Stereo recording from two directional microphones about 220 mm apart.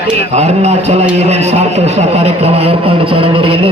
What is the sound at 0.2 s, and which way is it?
Speech, 30° right (ahead or behind).